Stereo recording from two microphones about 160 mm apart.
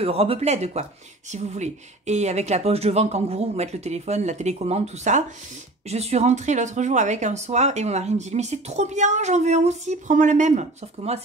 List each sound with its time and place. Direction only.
0.0 s speech: 35° right (ahead or behind)